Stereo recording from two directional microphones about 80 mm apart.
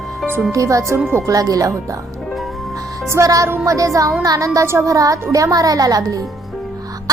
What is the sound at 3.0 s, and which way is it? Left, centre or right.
A woman's voice, right.